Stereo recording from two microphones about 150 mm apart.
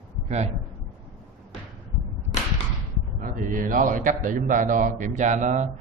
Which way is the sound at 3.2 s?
65° right (ahead or behind).